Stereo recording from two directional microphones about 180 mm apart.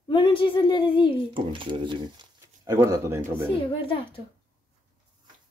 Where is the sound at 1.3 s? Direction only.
30° right (ahead or behind).